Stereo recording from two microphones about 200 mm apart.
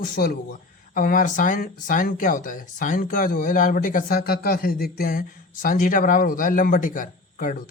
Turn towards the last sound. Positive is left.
turn(degrees=45)  # may be behind; listen again after turning